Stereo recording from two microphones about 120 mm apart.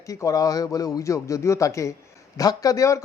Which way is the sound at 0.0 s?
25° left (ahead or behind).